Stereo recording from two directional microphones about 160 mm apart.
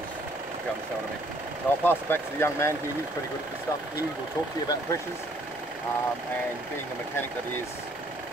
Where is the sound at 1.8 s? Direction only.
15° left (ahead or behind).